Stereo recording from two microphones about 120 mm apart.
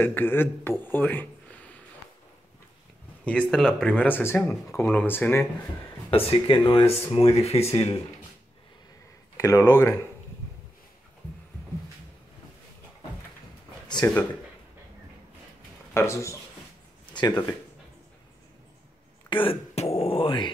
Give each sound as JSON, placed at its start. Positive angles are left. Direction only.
{"t": 0.0, "sound": "speech", "side_deg": 15}
{"t": 3.3, "sound": "speech", "side_deg": 5}
{"t": 6.0, "sound": "speech", "side_deg": 45}
{"t": 9.4, "sound": "speech", "side_deg": 25}
{"t": 14.0, "sound": "speech", "side_deg": 25}
{"t": 15.9, "sound": "speech", "side_deg": 20}
{"t": 17.3, "sound": "speech", "side_deg": 10}
{"t": 19.2, "sound": "throat clearing", "side_deg": 45}
{"t": 19.7, "sound": "speech", "side_deg": 60}